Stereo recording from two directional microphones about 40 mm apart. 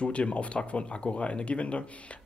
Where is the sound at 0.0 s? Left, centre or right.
Left.